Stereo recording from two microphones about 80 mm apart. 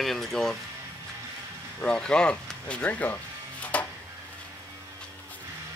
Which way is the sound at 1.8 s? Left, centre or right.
Centre.